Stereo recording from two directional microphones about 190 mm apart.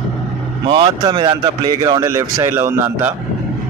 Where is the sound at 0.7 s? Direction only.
25° right (ahead or behind).